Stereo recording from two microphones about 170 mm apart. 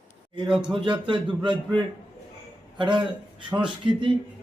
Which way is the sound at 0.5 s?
30° right (ahead or behind).